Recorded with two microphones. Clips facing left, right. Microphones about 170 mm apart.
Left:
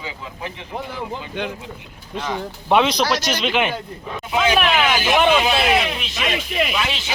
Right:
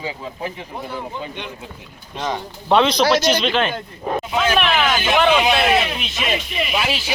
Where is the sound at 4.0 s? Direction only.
50° right (ahead or behind).